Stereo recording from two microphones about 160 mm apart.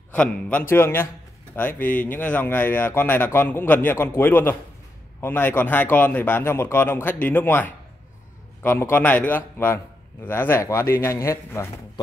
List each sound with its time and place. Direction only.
0.1 s speech: 5° left (ahead or behind)